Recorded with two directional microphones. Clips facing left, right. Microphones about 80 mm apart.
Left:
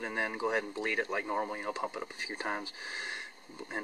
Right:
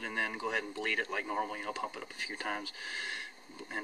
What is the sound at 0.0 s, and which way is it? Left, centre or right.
Speech, left.